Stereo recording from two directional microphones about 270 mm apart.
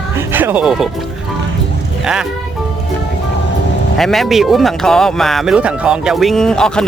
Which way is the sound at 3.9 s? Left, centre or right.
Centre.